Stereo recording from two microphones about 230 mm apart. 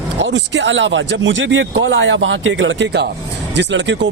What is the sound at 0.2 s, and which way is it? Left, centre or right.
Speech, right.